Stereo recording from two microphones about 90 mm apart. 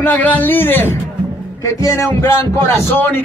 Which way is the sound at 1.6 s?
35° left (ahead or behind).